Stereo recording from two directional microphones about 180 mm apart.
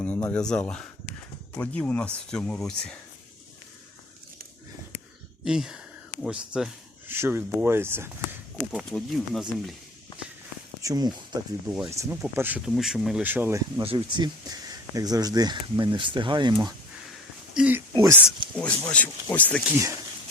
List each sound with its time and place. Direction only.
0.0 s speech: 10° left (ahead or behind)
5.5 s speech: 5° right (ahead or behind)
8.8 s speech: 5° left (ahead or behind)
10.8 s speech: 20° right (ahead or behind)
11.6 s speech: 5° right (ahead or behind)
11.9 s speech: 15° right (ahead or behind)
13.8 s speech: 25° right (ahead or behind)
17.5 s speech: 5° right (ahead or behind)
17.9 s a sound: 15° right (ahead or behind)
18.5 s speech: 5° left (ahead or behind)
19.7 s speech: 15° right (ahead or behind)